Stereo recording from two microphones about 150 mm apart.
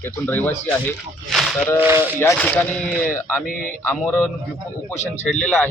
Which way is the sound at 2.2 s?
10° left (ahead or behind).